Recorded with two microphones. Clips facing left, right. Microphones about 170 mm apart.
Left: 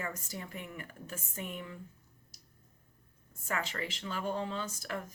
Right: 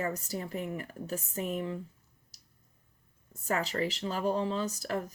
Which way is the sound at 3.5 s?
35° right (ahead or behind).